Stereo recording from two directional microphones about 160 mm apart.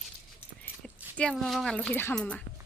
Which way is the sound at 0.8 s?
5° left (ahead or behind).